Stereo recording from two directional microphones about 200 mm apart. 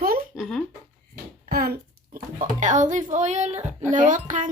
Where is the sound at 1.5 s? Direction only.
50° right (ahead or behind).